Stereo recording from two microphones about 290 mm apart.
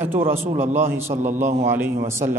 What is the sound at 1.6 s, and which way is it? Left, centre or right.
Speech, centre.